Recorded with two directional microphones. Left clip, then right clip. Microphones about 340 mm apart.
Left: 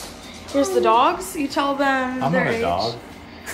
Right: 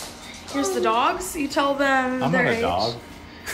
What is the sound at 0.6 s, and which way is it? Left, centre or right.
A woman's voice, centre.